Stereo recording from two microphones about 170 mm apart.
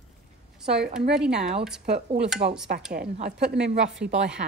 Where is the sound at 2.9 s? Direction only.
60° right (ahead or behind).